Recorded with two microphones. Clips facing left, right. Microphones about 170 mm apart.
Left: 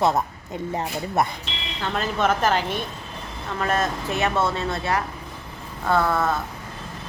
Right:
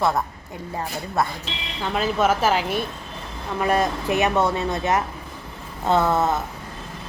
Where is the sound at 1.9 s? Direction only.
5° right (ahead or behind).